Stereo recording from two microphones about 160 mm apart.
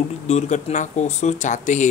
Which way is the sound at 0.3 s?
45° left (ahead or behind).